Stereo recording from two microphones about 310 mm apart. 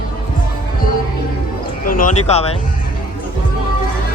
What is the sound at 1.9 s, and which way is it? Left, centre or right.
Speech, left.